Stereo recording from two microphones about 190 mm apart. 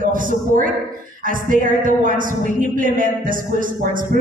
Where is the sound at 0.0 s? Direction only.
45° right (ahead or behind).